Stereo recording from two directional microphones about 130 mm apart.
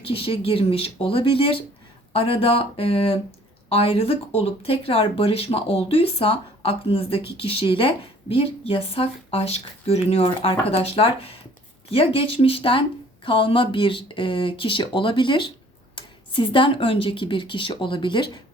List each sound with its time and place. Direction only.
0.1 s speech: 45° left (ahead or behind)